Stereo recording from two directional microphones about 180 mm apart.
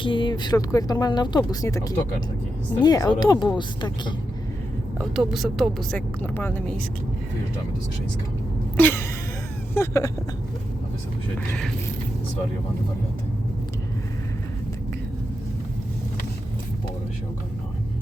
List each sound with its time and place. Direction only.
0.0 s speech: 25° left (ahead or behind)
5.1 s speech: centre (ahead or behind)
8.7 s a sound: 10° left (ahead or behind)